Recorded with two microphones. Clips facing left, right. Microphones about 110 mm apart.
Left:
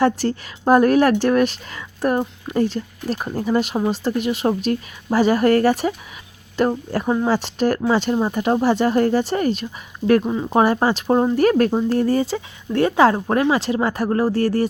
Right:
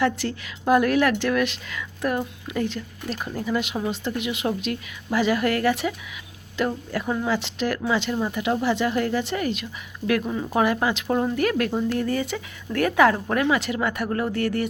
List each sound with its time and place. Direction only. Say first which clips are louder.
0.0 s speech: left 5 dB; 40° left (ahead or behind)